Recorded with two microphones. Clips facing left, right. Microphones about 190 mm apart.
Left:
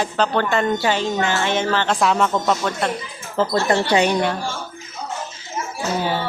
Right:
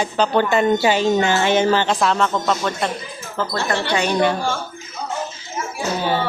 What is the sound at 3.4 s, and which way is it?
Speech, 25° left (ahead or behind).